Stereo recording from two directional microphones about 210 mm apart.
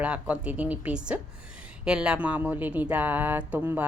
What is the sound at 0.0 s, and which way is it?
A woman's voice, 5° right (ahead or behind).